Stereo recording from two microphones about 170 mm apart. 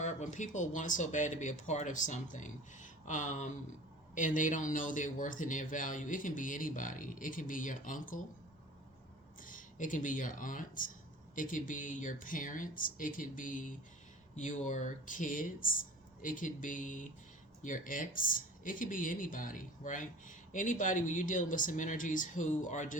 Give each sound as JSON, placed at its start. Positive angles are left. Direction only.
{"t": 0.0, "sound": "speech", "side_deg": 45}
{"t": 9.4, "sound": "speech", "side_deg": 50}